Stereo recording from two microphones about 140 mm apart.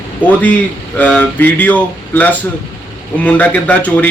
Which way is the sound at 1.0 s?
10° left (ahead or behind).